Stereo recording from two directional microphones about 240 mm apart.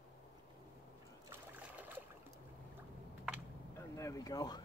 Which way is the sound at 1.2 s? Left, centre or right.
Centre.